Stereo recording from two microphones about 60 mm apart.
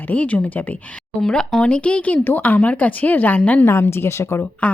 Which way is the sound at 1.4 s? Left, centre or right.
Centre.